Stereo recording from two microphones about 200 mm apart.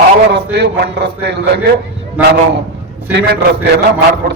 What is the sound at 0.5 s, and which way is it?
A man's voice, 55° right (ahead or behind).